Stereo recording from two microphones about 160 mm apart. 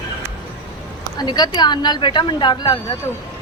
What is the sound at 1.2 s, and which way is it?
A woman's voice, 25° left (ahead or behind).